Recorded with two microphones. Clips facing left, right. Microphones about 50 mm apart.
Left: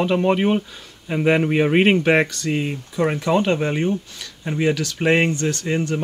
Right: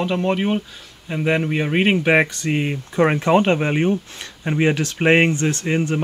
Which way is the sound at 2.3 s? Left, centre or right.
Right.